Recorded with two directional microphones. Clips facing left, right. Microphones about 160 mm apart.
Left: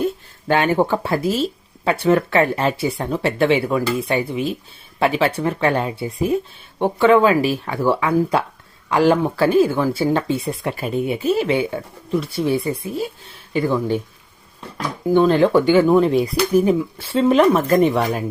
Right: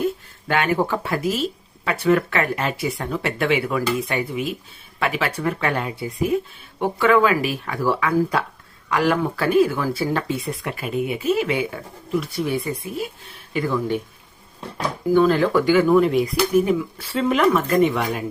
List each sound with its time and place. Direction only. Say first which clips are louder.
0.4 s speech: left 4 dB; 30° left (ahead or behind)
15.0 s speech: left 2 dB; 25° left (ahead or behind)